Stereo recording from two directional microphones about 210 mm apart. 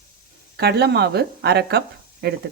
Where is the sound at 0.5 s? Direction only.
50° right (ahead or behind).